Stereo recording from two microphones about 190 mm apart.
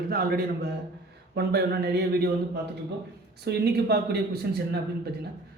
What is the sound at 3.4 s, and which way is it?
A man's voice, 60° right (ahead or behind).